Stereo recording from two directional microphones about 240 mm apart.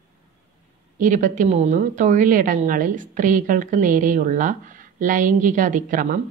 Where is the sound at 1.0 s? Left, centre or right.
Right.